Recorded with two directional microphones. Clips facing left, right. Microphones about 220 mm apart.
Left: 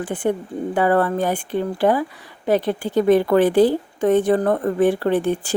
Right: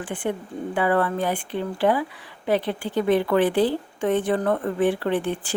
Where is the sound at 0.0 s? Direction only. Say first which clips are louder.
Left 6 dB; 40° left (ahead or behind).